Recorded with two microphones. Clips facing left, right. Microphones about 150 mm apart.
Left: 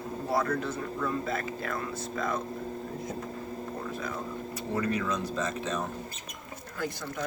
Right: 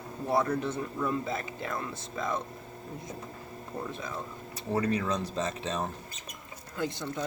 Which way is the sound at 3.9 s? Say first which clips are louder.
Left 3 dB; 25° right (ahead or behind).